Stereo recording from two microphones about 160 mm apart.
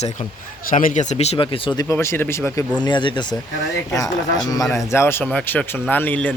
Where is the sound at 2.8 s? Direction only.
30° left (ahead or behind).